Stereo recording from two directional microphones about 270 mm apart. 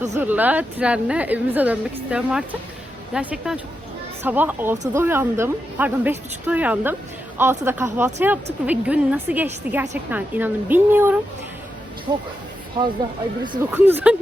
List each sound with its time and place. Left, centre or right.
0.1 s a woman's voice: centre
13.4 s a woman's voice: centre